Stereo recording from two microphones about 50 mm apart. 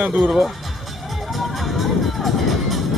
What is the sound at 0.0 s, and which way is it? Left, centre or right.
Speech, right.